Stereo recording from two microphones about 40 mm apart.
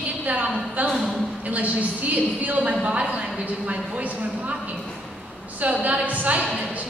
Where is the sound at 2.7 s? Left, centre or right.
Right.